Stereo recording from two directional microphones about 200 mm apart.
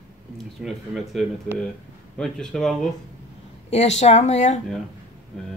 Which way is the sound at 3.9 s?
35° left (ahead or behind).